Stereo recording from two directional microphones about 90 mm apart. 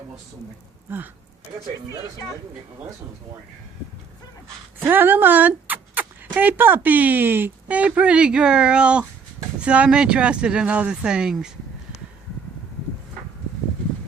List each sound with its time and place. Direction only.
0.9 s speech: 20° right (ahead or behind)
4.8 s speech: 25° right (ahead or behind); by 11.5 s 5° right (ahead or behind)